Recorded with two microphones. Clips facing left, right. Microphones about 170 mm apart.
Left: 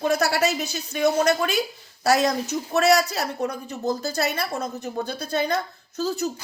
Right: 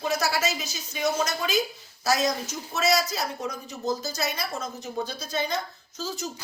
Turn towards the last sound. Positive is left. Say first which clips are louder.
# left 8 dB
turn(degrees=60)  # may be behind; listen again after turning